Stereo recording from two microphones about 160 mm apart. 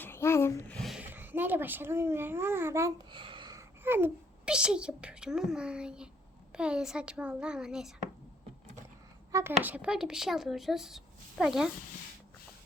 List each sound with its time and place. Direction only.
0.0 s speech: 15° left (ahead or behind)
0.8 s a sound: centre (ahead or behind)
1.0 s a child's voice: 10° right (ahead or behind)
3.1 s a sound: 30° right (ahead or behind)
3.8 s a woman's voice: 15° right (ahead or behind)
9.3 s a woman's voice: 15° right (ahead or behind)